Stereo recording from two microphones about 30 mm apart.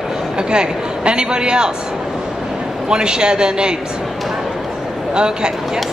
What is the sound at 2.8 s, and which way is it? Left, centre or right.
Speech, right.